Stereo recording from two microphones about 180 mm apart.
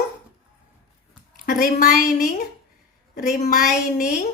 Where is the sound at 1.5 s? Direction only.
45° left (ahead or behind).